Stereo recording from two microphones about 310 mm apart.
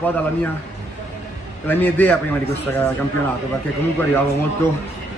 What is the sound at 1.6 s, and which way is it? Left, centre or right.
Speech, centre.